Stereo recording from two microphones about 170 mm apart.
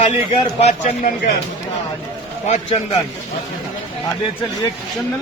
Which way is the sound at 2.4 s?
40° left (ahead or behind).